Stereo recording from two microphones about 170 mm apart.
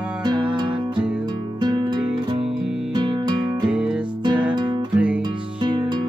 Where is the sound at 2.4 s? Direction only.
5° right (ahead or behind).